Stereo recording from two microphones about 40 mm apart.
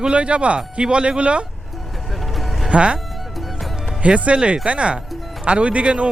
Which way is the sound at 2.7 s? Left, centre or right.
Right.